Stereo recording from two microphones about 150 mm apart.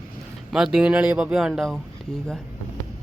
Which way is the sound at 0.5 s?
5° right (ahead or behind).